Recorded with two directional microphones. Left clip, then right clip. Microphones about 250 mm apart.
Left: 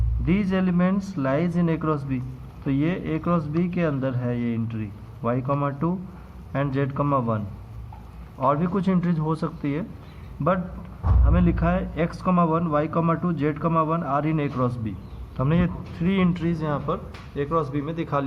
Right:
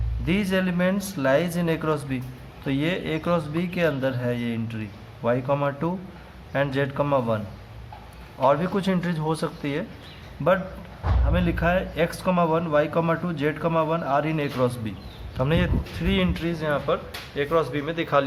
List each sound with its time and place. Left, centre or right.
0.3 s speech: right